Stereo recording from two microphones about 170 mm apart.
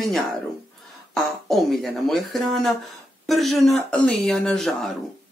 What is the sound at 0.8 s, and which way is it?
Speech, centre (ahead or behind).